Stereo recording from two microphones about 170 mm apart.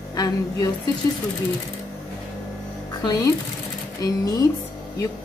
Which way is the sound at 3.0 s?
20° left (ahead or behind).